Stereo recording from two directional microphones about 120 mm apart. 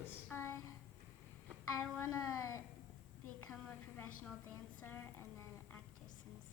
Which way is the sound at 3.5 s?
5° left (ahead or behind).